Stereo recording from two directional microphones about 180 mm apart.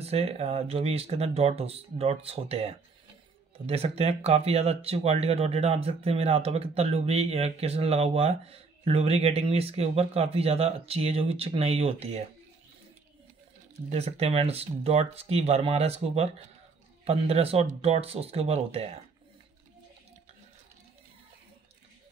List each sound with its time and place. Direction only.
0.0 s speech: 35° right (ahead or behind)
13.8 s speech: 35° right (ahead or behind)